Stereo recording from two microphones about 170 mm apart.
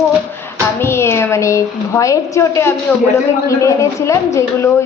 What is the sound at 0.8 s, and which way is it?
A woman's voice, 15° left (ahead or behind).